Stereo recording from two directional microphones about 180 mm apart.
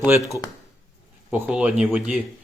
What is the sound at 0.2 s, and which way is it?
Speech, 15° left (ahead or behind).